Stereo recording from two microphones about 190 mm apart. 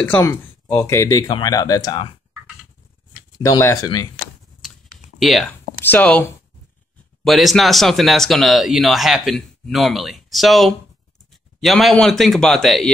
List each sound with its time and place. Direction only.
0.1 s speech: 10° left (ahead or behind)
3.4 s speech: 15° left (ahead or behind)
4.6 s computer keyboard: centre (ahead or behind)
7.2 s speech: centre (ahead or behind)